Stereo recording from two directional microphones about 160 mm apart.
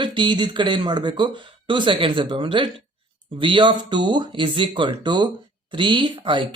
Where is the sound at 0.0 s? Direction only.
30° right (ahead or behind).